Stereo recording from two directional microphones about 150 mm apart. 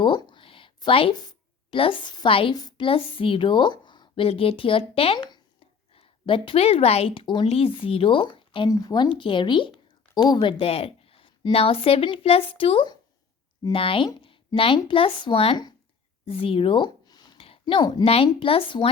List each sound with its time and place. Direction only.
0.0 s a woman's voice: 30° left (ahead or behind)
14.1 s a sound: 35° left (ahead or behind)
14.8 s speech: 35° left (ahead or behind)